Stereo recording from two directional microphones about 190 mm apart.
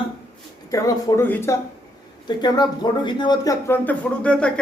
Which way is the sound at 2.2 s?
20° left (ahead or behind).